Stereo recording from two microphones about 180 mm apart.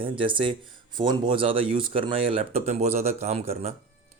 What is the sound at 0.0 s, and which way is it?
Speech, 30° right (ahead or behind).